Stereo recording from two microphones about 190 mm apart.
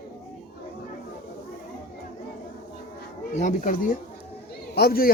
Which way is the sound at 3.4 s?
40° left (ahead or behind).